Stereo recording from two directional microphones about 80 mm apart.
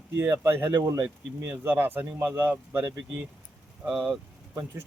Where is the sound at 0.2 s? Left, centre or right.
Right.